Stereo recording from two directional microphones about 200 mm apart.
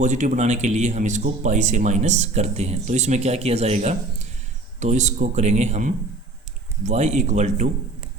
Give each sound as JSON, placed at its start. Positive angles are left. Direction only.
{"t": 0.0, "sound": "speech", "side_deg": -35}